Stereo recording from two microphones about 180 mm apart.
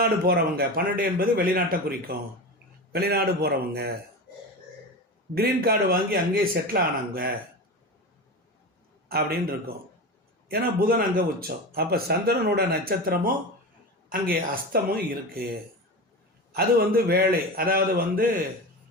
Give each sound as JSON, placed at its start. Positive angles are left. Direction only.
{"t": 0.0, "sound": "speech", "side_deg": -55}
{"t": 5.3, "sound": "speech", "side_deg": -55}
{"t": 9.0, "sound": "speech", "side_deg": -60}
{"t": 14.5, "sound": "speech", "side_deg": -55}
{"t": 16.5, "sound": "speech", "side_deg": -60}